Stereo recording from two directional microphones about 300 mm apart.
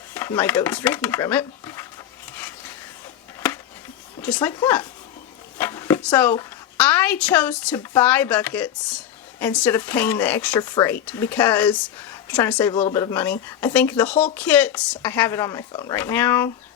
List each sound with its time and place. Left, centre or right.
0.1 s speech: centre
4.2 s a woman's voice: centre